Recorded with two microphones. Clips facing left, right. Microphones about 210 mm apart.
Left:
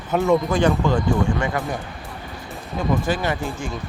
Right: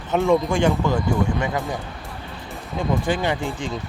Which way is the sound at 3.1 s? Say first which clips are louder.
Right 1 dB; 20° right (ahead or behind).